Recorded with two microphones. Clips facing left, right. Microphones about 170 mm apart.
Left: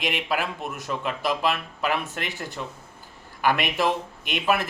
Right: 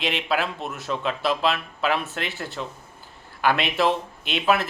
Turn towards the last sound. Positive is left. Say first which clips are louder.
# right 2 dB
turn(degrees=15)  # may be behind; listen again after turning